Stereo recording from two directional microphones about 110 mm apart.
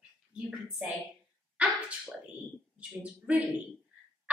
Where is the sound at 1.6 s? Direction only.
10° right (ahead or behind).